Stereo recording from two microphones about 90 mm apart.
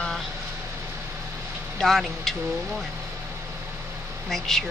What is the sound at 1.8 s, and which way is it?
Speech, 5° left (ahead or behind).